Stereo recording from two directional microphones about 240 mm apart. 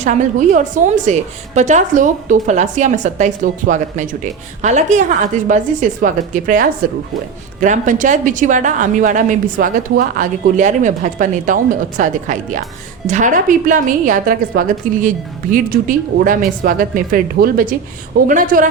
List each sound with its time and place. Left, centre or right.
0.0 s a woman's voice: right